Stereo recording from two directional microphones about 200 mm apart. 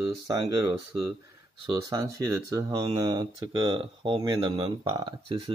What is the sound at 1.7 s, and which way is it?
Speech, 20° right (ahead or behind).